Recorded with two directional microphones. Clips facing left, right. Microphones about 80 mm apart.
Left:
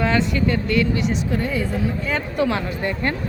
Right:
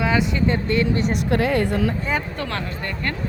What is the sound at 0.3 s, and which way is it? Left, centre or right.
Speech, right.